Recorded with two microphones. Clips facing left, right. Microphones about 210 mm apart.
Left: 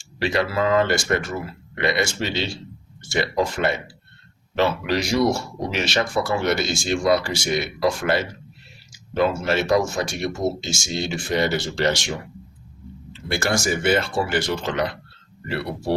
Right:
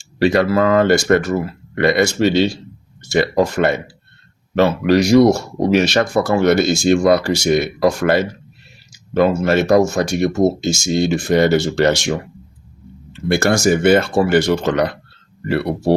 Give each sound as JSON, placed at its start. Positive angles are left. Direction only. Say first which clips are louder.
{"t": 0.2, "sound": "speech", "louder": "right 8 dB", "side_deg": -45}
{"t": 13.2, "sound": "speech", "louder": "right 8 dB", "side_deg": -50}
{"t": 15.4, "sound": "speech", "louder": "right 8 dB", "side_deg": -50}